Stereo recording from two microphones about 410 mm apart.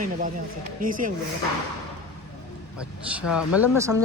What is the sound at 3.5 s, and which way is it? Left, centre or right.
Speech, centre.